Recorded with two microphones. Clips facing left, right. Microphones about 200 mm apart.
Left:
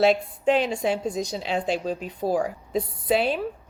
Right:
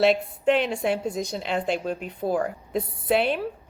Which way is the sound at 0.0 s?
Centre (ahead or behind).